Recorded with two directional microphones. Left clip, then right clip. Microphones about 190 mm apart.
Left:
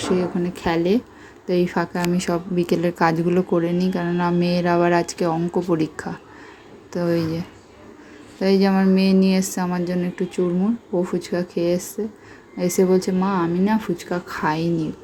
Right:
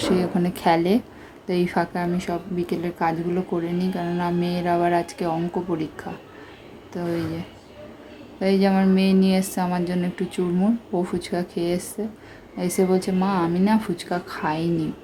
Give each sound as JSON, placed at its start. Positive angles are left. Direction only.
{"t": 0.4, "sound": "a woman's voice", "side_deg": 0}
{"t": 1.6, "sound": "a woman's voice", "side_deg": 15}